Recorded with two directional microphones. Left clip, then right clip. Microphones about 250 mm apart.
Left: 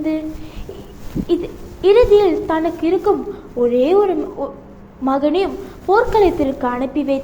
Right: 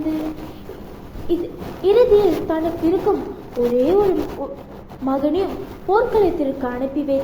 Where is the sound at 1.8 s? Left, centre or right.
Left.